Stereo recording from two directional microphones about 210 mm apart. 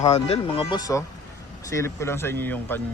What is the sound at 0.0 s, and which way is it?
Speech, 30° left (ahead or behind).